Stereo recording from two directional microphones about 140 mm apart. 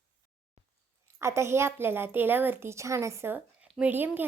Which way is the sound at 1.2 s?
20° right (ahead or behind).